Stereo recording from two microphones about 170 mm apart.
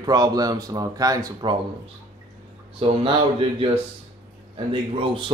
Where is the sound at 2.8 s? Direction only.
30° right (ahead or behind).